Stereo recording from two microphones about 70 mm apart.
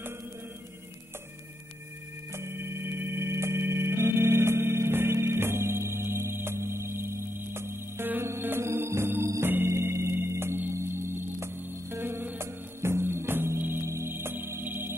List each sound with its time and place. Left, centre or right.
2.3 s organ: right
9.4 s chirp tone: right